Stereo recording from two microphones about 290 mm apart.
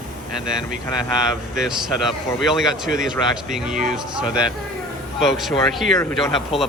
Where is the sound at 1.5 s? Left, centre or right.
Centre.